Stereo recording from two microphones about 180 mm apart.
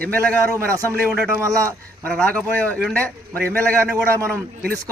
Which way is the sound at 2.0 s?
5° left (ahead or behind).